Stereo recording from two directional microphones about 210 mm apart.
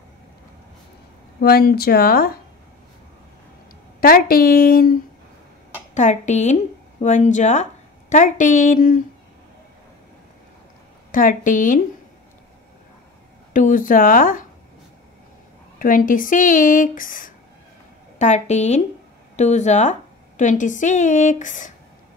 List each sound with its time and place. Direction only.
1.4 s a woman's voice: 50° left (ahead or behind)
4.0 s a woman's voice: 45° left (ahead or behind)
5.9 s a woman's voice: 35° left (ahead or behind)
11.1 s a woman's voice: 40° left (ahead or behind)
13.5 s a woman's voice: 40° left (ahead or behind)
15.8 s a woman's voice: 40° left (ahead or behind)